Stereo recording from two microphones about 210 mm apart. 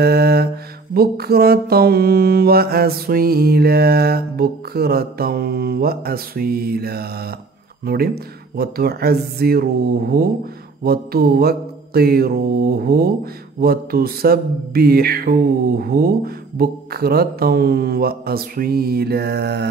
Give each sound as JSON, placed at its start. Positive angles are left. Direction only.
{"t": 0.0, "sound": "mantra", "side_deg": -50}